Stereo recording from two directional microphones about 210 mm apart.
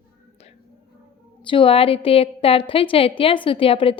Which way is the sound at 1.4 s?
25° left (ahead or behind).